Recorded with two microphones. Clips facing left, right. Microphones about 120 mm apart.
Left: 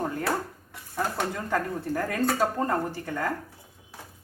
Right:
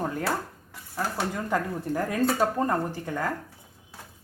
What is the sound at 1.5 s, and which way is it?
Speech, 15° right (ahead or behind).